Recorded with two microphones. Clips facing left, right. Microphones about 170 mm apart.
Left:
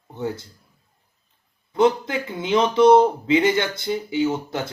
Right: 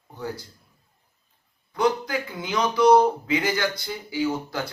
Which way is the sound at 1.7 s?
25° left (ahead or behind).